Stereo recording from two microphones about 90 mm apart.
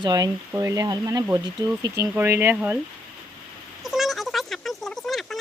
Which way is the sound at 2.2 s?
25° right (ahead or behind).